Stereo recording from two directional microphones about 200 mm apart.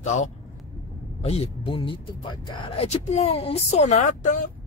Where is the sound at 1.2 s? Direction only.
30° left (ahead or behind).